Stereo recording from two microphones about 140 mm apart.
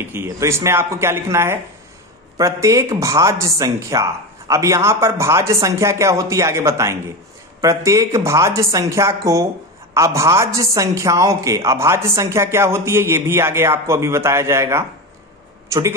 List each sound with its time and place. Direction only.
0.0 s a woman's voice: 15° right (ahead or behind)